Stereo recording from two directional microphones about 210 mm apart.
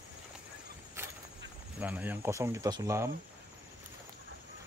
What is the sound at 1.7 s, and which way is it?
Speech, 5° right (ahead or behind).